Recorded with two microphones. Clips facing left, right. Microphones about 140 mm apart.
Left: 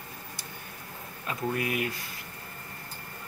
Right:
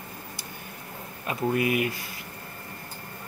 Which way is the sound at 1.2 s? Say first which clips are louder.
Right 5 dB; 10° right (ahead or behind).